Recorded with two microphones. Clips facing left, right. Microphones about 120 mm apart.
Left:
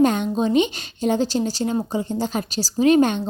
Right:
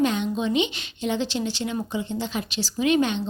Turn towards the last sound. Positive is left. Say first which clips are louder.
# left 5 dB
turn(degrees=45)  # may be behind; listen again after turning